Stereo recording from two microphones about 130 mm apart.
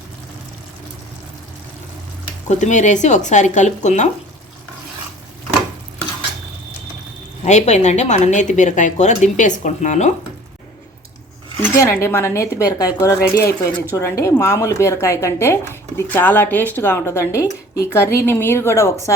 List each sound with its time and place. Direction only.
2.5 s speech: 70° left (ahead or behind)
7.4 s speech: 60° left (ahead or behind)
11.6 s a woman's voice: 20° left (ahead or behind)